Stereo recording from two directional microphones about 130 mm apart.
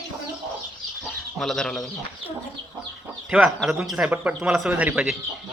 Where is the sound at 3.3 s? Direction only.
5° right (ahead or behind).